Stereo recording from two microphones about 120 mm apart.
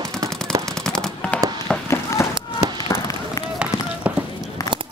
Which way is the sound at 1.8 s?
25° left (ahead or behind).